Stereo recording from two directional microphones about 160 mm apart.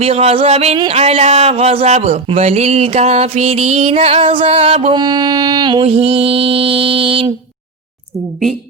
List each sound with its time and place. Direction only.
0.0 s speech: 40° right (ahead or behind)
4.9 s speech: 25° right (ahead or behind)